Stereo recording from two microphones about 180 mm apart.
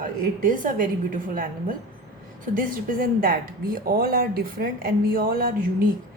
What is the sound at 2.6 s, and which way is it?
Speech, 50° right (ahead or behind).